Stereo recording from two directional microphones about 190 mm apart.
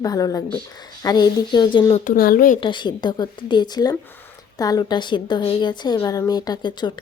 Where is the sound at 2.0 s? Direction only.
50° left (ahead or behind).